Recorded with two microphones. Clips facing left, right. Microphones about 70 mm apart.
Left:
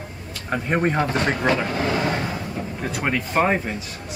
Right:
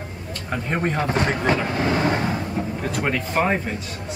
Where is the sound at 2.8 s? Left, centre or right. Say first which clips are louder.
Left 2 dB; centre.